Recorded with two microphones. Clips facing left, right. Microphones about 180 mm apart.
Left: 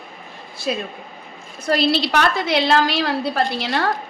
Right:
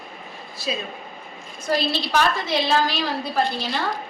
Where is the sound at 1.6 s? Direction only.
75° left (ahead or behind).